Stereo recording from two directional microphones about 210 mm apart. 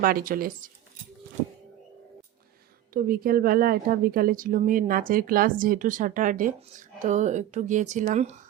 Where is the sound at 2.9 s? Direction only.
45° right (ahead or behind).